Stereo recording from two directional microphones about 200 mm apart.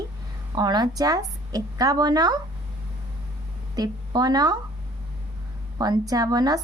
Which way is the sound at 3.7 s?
20° right (ahead or behind).